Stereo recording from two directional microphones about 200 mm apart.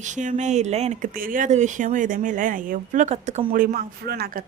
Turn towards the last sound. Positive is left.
turn(degrees=-50)  # may be behind; listen again after turning